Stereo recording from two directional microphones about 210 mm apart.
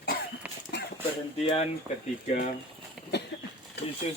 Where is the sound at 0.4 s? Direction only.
5° right (ahead or behind).